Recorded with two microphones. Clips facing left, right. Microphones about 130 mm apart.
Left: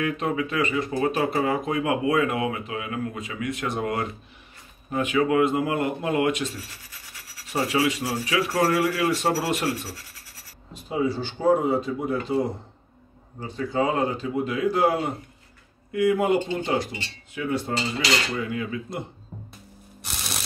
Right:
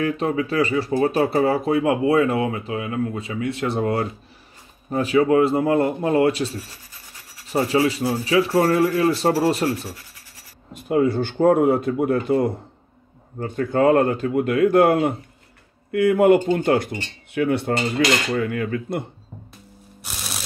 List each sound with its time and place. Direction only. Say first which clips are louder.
0.0 s speech: right 4 dB; 30° right (ahead or behind)
7.5 s speech: right 4 dB; 35° right (ahead or behind)
10.7 s speech: right 6 dB; 55° right (ahead or behind)